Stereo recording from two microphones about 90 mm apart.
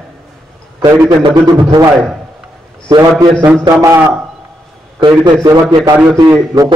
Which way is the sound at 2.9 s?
50° right (ahead or behind).